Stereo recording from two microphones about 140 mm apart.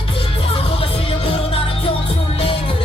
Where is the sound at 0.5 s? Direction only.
45° left (ahead or behind).